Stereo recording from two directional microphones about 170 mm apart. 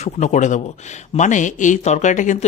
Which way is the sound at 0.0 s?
45° left (ahead or behind).